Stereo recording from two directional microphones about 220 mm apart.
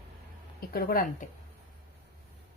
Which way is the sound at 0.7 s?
40° left (ahead or behind).